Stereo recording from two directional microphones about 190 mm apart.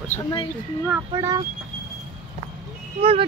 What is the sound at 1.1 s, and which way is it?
Speech, 20° right (ahead or behind).